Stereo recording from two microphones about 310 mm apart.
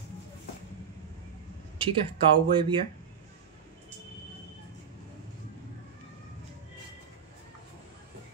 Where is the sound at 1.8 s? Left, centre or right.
Centre.